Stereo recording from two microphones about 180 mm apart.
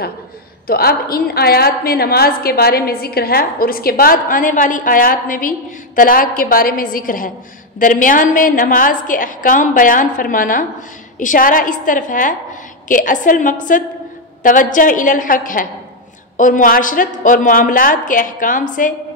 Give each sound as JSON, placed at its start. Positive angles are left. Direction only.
{"t": 0.7, "sound": "a woman's voice", "side_deg": 55}